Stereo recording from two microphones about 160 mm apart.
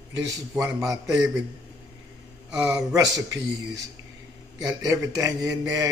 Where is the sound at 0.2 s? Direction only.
20° right (ahead or behind).